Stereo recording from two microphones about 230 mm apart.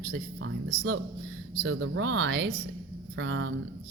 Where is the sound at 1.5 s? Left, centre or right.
Right.